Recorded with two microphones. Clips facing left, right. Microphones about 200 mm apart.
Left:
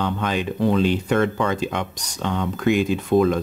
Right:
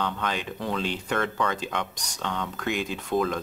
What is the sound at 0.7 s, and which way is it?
Speech, 15° left (ahead or behind).